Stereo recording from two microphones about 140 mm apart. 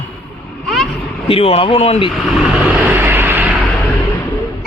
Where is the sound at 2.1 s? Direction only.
5° right (ahead or behind).